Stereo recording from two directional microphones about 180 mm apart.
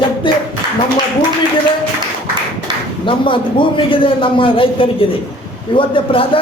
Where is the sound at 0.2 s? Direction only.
25° left (ahead or behind).